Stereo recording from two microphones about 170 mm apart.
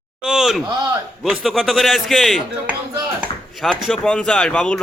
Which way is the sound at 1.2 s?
5° right (ahead or behind).